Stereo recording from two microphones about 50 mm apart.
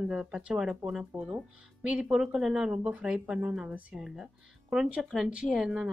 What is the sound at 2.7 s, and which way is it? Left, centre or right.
Speech, right.